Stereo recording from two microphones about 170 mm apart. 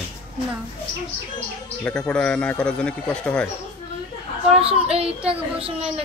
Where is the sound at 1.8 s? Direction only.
5° left (ahead or behind).